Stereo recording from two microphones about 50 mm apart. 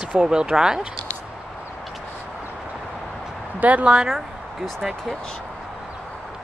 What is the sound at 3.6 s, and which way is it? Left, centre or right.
Speech, right.